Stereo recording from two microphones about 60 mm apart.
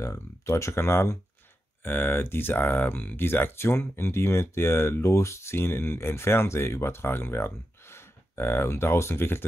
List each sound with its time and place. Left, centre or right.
0.0 s speech: left